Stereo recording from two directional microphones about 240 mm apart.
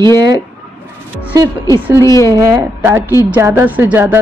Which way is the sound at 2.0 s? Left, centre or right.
Centre.